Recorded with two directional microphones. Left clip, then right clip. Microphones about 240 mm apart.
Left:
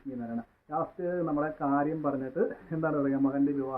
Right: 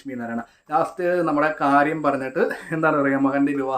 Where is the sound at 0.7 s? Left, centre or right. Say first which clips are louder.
Right 11 dB; centre.